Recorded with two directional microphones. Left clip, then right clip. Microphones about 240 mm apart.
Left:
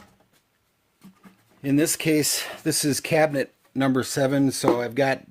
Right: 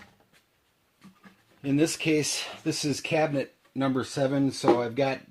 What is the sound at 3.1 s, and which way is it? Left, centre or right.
Speech, left.